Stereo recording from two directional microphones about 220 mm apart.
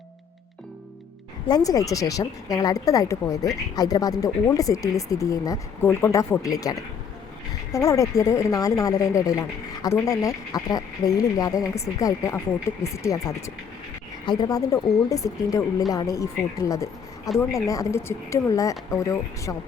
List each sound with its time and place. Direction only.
1.5 s speech: 15° left (ahead or behind)